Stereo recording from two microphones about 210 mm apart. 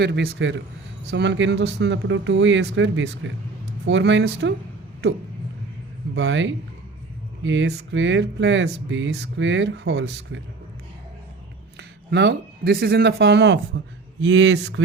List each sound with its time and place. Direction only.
0.0 s speech: 50° right (ahead or behind)
6.1 s speech: 60° right (ahead or behind)
11.8 s speech: 55° right (ahead or behind)